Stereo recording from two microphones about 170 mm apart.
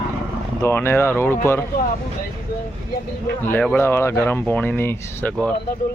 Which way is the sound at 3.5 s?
10° left (ahead or behind).